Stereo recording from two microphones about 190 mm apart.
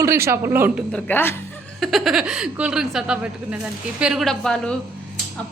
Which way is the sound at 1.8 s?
Centre (ahead or behind).